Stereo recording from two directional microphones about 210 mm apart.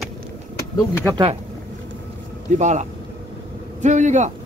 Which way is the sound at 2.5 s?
35° right (ahead or behind).